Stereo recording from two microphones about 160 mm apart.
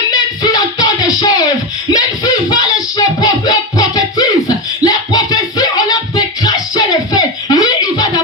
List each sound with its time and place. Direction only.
0.1 s music: 25° left (ahead or behind)
1.9 s a sound: 25° left (ahead or behind)
3.2 s music: 25° left (ahead or behind)